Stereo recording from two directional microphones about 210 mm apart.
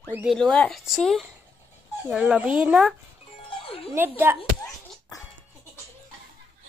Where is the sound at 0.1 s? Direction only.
5° right (ahead or behind).